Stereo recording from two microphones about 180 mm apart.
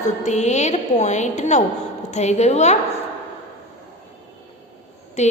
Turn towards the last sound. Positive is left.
turn(degrees=40)  # may be behind; listen again after turning